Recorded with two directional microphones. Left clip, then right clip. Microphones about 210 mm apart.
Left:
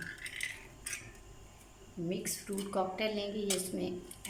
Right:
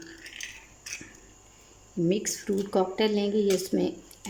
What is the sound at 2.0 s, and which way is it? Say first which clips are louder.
Speech: right 11 dB; 40° right (ahead or behind).